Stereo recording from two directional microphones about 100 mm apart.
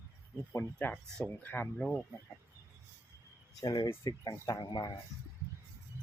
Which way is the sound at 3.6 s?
40° left (ahead or behind).